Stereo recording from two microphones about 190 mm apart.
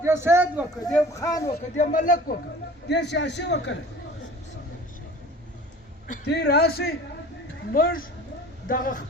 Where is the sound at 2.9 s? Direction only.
65° left (ahead or behind).